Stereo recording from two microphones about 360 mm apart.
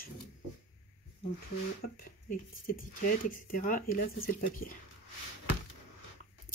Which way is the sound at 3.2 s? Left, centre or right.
Left.